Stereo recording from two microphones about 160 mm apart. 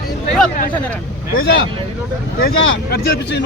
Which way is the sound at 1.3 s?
90° left.